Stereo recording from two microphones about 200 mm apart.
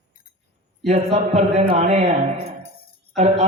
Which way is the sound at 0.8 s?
30° right (ahead or behind).